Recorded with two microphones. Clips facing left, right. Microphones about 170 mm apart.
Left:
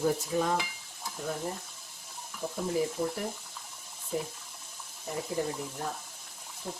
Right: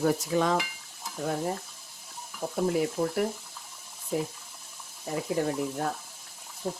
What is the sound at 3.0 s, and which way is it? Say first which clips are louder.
Speech: right 3 dB; 55° right (ahead or behind).